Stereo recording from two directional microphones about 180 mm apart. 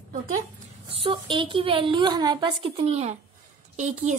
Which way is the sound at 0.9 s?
30° right (ahead or behind).